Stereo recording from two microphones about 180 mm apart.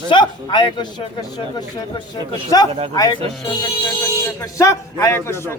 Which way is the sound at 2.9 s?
20° left (ahead or behind).